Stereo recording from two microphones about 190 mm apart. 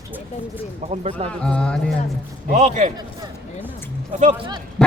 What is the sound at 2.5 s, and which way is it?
Speech, 40° right (ahead or behind).